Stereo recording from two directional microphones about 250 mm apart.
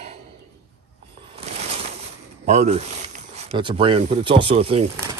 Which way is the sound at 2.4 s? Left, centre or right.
Right.